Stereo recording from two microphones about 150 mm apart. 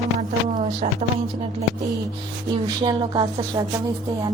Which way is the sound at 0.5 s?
45° right (ahead or behind).